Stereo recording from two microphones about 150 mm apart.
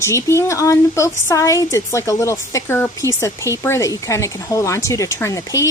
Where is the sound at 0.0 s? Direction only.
20° left (ahead or behind).